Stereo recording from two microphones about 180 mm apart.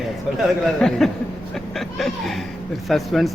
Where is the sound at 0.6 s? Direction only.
5° left (ahead or behind).